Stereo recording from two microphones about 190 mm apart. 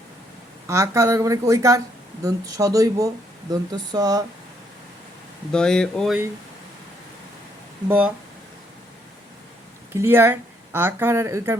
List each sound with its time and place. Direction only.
0.7 s speech: 15° right (ahead or behind)
5.5 s speech: 5° left (ahead or behind)
7.9 s speech: 10° right (ahead or behind)
9.9 s speech: 10° right (ahead or behind)